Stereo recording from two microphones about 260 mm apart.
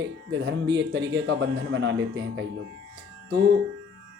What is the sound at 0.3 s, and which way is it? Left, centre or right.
Speech, right.